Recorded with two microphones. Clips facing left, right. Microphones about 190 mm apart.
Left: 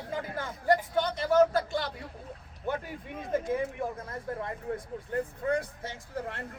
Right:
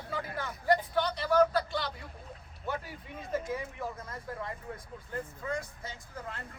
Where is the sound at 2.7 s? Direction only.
55° left (ahead or behind).